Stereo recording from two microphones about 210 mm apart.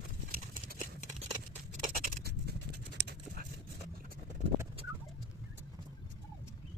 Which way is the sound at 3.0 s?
55° right (ahead or behind).